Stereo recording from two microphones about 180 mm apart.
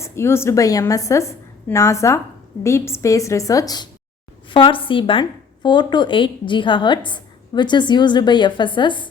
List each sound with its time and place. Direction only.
0.0 s a woman's voice: 15° left (ahead or behind)